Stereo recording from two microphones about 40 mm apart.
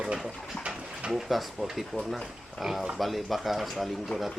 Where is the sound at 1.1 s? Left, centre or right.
Centre.